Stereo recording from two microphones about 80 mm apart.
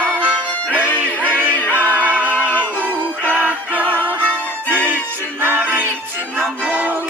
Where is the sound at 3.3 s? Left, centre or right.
Right.